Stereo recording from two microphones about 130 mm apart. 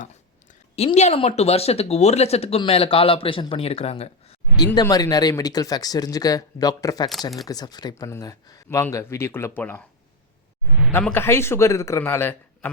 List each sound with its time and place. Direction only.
0.8 s speech: 55° left (ahead or behind)
4.5 s speech: 30° left (ahead or behind)
7.1 s speech: centre (ahead or behind)
7.4 s speech: 30° left (ahead or behind)
11.0 s speech: 15° left (ahead or behind)